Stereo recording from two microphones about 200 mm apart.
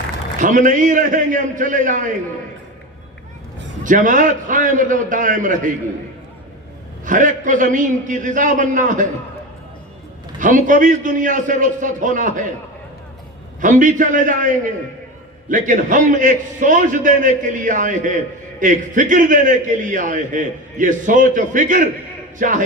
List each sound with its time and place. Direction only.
0.3 s a man's voice: 40° right (ahead or behind)
3.8 s a man's voice: 40° right (ahead or behind)
7.0 s a man's voice: 40° right (ahead or behind)
10.4 s a man's voice: 40° right (ahead or behind)
13.6 s a man's voice: 40° right (ahead or behind)